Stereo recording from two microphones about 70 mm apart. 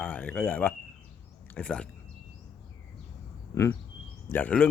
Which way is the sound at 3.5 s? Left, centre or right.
Left.